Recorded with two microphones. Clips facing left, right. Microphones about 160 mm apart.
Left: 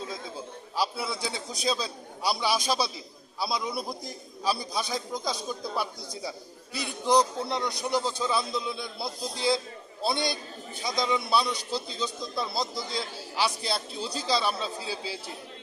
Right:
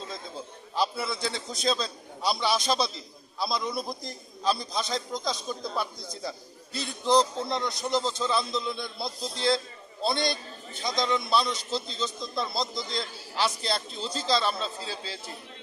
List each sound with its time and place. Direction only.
0.8 s a man's voice: 10° left (ahead or behind)